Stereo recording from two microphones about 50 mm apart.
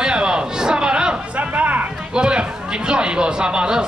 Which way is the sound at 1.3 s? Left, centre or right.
Right.